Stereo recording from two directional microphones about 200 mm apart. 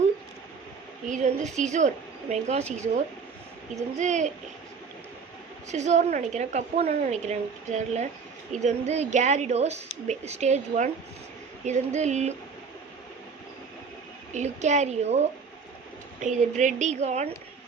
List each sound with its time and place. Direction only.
1.0 s a woman's voice: 40° right (ahead or behind)
4.0 s a woman's voice: 35° right (ahead or behind)
5.7 s a woman's voice: 35° right (ahead or behind)
14.3 s a woman's voice: 35° right (ahead or behind)